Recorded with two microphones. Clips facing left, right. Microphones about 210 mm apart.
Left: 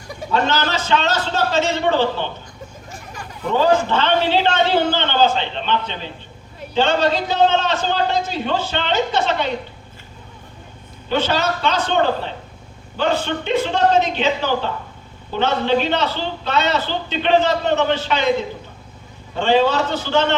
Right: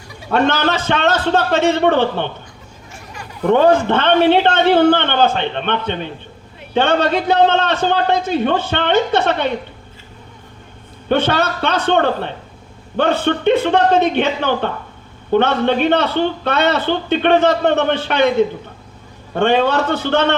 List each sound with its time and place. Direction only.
0.3 s a man's voice: 55° right (ahead or behind)
3.4 s a man's voice: 60° right (ahead or behind)
11.1 s a man's voice: 60° right (ahead or behind)